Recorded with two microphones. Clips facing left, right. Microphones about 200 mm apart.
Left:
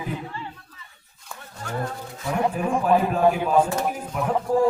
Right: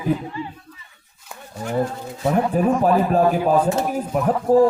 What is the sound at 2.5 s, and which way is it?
Speech, 40° right (ahead or behind).